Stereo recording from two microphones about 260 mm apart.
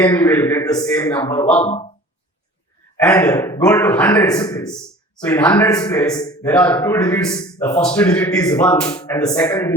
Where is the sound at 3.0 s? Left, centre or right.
Centre.